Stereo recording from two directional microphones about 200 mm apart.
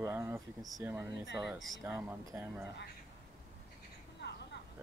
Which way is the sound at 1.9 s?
15° right (ahead or behind).